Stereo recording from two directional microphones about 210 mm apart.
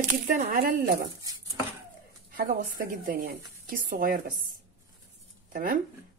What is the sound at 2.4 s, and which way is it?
A woman's voice, 45° right (ahead or behind).